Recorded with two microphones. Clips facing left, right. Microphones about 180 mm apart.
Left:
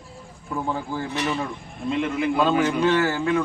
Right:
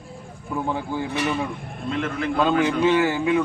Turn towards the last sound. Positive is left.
turn(degrees=-5)  # may be behind; listen again after turning